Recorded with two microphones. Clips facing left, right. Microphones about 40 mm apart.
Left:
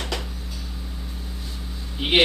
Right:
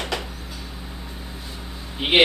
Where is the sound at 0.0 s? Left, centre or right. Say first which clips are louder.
Right 2 dB; centre.